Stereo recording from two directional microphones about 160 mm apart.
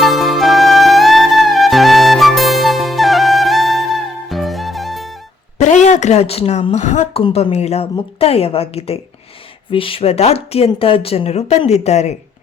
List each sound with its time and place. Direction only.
0.0 s music: centre (ahead or behind)
5.5 s a woman's voice: 45° left (ahead or behind)